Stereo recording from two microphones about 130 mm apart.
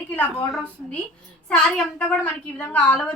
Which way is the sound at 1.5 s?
10° left (ahead or behind).